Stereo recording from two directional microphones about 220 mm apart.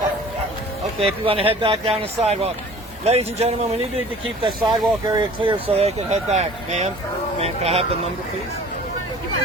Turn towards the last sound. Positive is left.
turn(degrees=-30)  # may be behind; listen again after turning